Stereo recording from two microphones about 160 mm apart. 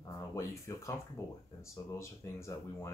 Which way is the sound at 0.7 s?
20° left (ahead or behind).